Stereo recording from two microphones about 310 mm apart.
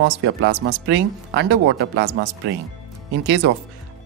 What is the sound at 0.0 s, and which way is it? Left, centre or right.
Speech, right.